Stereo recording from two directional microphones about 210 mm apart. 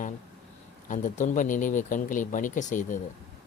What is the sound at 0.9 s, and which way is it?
Speech, 35° left (ahead or behind).